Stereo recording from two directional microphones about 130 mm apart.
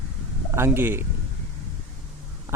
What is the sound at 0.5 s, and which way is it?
Speech, 20° right (ahead or behind).